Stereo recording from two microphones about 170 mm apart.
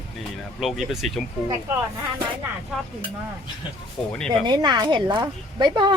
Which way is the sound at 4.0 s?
5° left (ahead or behind).